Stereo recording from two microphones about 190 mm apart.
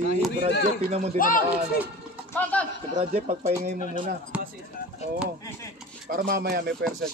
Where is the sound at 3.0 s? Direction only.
35° right (ahead or behind).